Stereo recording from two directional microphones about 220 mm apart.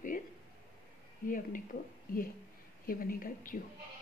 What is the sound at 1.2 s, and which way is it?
Speech, 35° left (ahead or behind).